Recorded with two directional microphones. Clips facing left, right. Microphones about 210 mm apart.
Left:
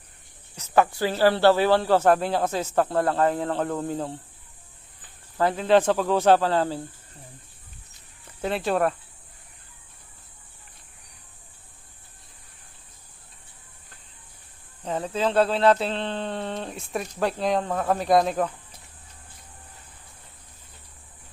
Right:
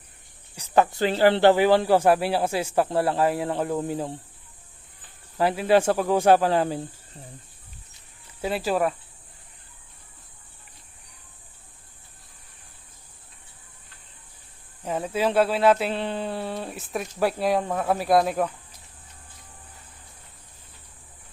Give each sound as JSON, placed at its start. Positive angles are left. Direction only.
{"t": 0.5, "sound": "speech", "side_deg": -15}
{"t": 5.4, "sound": "speech", "side_deg": -10}
{"t": 8.4, "sound": "speech", "side_deg": -5}
{"t": 14.8, "sound": "speech", "side_deg": -10}